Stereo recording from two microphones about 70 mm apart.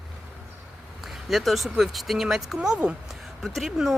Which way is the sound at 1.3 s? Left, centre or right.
Centre.